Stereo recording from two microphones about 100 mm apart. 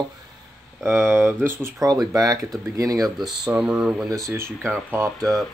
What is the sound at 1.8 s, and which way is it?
Speech, 40° right (ahead or behind).